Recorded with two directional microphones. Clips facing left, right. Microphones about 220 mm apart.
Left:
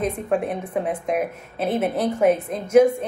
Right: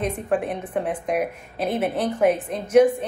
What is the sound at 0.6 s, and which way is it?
A woman's voice, 10° left (ahead or behind).